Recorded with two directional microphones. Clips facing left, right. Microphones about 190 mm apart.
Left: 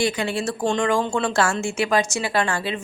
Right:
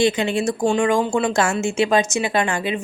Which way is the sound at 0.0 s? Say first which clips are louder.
Right 4 dB; 20° right (ahead or behind).